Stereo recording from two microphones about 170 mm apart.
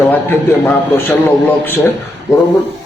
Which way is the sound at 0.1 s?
10° left (ahead or behind).